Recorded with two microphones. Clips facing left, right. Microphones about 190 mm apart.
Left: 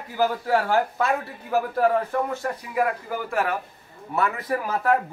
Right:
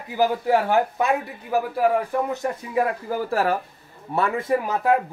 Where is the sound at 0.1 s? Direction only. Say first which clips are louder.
Right 2 dB; 15° right (ahead or behind).